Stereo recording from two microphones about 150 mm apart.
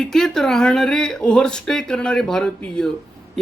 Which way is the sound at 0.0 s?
Centre (ahead or behind).